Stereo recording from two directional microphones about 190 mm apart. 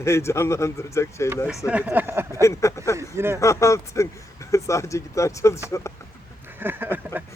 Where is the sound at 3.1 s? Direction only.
15° right (ahead or behind).